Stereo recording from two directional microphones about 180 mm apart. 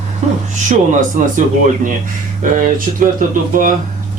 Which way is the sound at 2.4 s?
45° right (ahead or behind).